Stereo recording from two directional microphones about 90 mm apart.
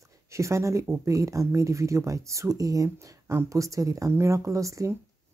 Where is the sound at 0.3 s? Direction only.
35° right (ahead or behind).